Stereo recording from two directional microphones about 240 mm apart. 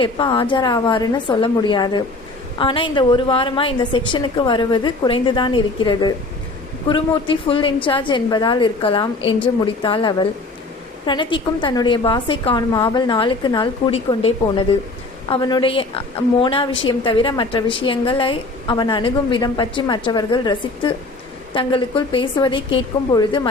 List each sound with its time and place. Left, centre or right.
0.0 s a woman's voice: left